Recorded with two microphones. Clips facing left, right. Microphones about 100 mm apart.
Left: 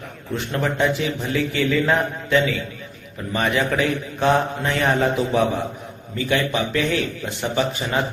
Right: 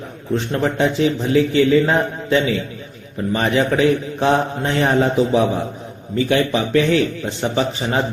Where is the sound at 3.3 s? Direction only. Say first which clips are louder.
Right 3 dB; 35° right (ahead or behind).